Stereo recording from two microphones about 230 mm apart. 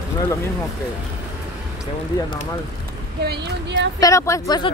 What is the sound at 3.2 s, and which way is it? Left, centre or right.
Speech, right.